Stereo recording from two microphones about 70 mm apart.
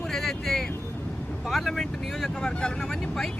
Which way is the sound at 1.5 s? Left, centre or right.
Centre.